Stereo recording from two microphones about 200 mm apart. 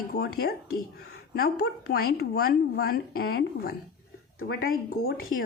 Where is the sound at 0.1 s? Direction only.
50° left (ahead or behind).